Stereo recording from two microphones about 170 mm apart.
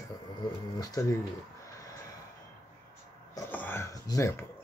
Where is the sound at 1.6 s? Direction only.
20° left (ahead or behind).